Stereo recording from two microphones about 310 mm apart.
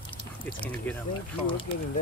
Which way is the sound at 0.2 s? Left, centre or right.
Centre.